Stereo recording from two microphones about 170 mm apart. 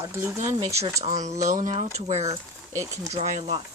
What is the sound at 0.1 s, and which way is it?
Speech, 15° right (ahead or behind).